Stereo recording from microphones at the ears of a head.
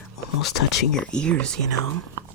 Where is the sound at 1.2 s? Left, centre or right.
Right.